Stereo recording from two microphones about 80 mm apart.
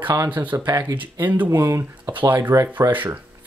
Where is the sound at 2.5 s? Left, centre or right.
Right.